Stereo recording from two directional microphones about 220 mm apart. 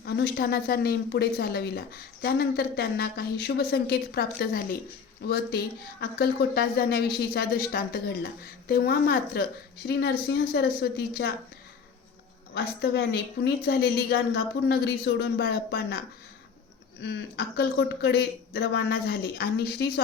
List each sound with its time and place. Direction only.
0.0 s speech: 45° left (ahead or behind)
12.5 s speech: 45° left (ahead or behind)
17.0 s speech: 45° left (ahead or behind)